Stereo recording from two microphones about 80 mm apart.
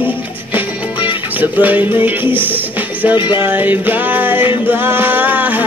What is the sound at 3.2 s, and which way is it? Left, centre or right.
Music, left.